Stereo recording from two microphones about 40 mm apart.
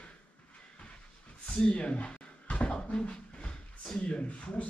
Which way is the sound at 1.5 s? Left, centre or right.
Left.